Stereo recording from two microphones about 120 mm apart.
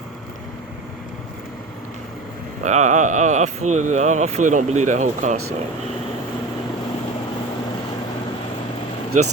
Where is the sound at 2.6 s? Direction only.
90° right.